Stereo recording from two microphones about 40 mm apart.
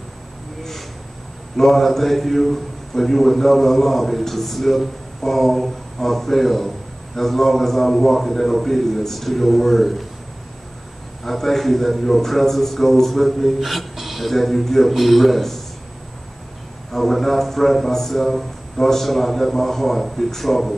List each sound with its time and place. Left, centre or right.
1.6 s a man's voice: centre
11.2 s a man's voice: centre
16.9 s a man's voice: centre